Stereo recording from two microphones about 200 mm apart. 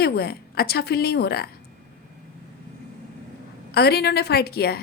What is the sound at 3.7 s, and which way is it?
A woman's voice, 50° left (ahead or behind).